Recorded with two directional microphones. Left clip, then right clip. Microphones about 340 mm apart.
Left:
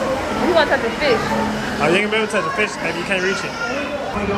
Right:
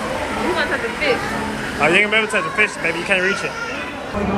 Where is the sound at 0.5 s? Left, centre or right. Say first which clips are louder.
Left 4 dB; left.